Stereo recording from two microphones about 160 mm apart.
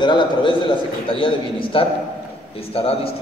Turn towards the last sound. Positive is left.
turn(degrees=35)  # may be behind; listen again after turning